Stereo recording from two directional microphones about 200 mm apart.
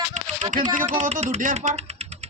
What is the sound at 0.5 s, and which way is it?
Speech, 40° right (ahead or behind).